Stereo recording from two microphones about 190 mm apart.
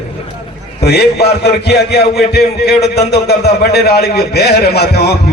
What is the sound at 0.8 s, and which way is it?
A man's voice, 60° left (ahead or behind).